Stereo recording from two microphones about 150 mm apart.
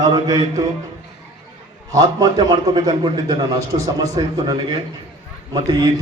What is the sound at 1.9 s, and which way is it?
A man's voice, 25° right (ahead or behind).